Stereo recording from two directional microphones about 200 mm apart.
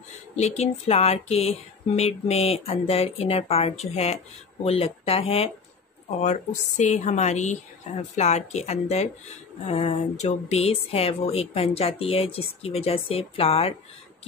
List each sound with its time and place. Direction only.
0.4 s speech: 35° left (ahead or behind)